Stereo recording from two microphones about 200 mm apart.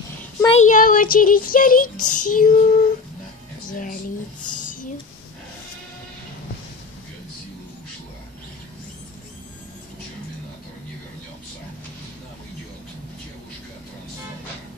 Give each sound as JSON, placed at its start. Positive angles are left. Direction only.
{"t": 0.5, "sound": "child singing", "side_deg": 35}
{"t": 3.7, "sound": "speech", "side_deg": 40}
{"t": 4.6, "sound": "a sound", "side_deg": 40}